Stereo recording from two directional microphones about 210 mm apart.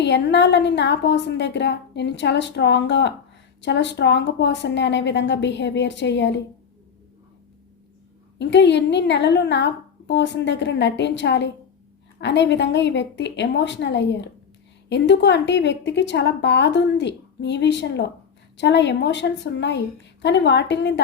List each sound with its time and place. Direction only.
0.0 s a woman's voice: 55° left (ahead or behind)
8.4 s a woman's voice: 55° left (ahead or behind)